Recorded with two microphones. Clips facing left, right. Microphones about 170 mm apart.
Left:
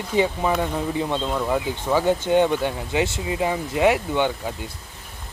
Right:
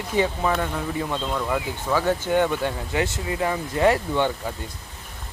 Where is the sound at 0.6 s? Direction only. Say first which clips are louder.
Left 3 dB; 20° left (ahead or behind).